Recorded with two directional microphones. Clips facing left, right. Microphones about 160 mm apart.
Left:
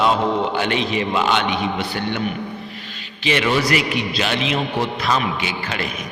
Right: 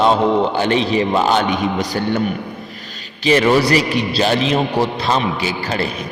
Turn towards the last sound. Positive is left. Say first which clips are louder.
# right 5 dB
turn(degrees=-35)  # may be behind; listen again after turning